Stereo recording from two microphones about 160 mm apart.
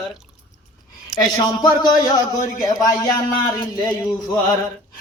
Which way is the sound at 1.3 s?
25° left (ahead or behind).